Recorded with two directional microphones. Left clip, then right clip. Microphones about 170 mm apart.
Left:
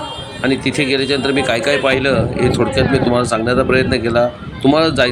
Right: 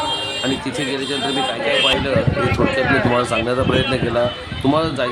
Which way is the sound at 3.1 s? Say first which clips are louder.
Left 3 dB; 5° left (ahead or behind).